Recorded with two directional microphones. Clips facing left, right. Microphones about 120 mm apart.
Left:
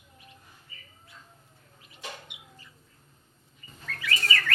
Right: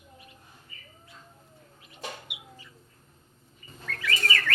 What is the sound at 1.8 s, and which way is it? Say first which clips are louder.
Chicken: right 2 dB; 5° right (ahead or behind).